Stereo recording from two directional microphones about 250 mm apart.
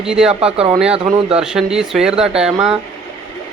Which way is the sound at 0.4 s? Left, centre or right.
Right.